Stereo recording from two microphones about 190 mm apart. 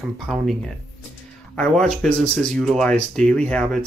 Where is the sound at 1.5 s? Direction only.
5° left (ahead or behind).